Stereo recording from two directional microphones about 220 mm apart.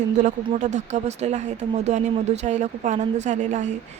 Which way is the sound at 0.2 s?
35° right (ahead or behind).